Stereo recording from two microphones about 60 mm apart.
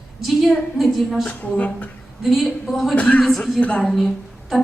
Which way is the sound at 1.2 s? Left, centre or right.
Left.